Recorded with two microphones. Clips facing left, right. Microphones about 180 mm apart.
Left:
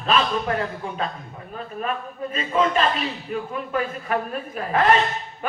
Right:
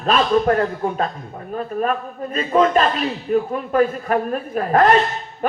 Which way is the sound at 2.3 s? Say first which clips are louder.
Right 6 dB; 40° right (ahead or behind).